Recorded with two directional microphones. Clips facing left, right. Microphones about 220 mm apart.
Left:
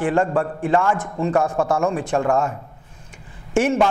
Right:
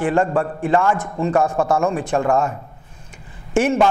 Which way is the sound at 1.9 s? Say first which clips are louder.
Right 1 dB; 10° right (ahead or behind).